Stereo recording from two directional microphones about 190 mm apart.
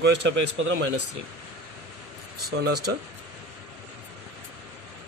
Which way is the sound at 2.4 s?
55° right (ahead or behind).